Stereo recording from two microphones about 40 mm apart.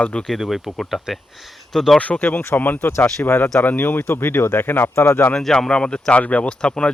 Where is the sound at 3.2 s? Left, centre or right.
Left.